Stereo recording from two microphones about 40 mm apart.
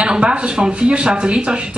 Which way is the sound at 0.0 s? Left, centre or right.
Right.